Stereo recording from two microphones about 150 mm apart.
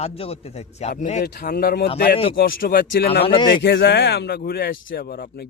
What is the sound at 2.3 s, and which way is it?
Speech, 80° left.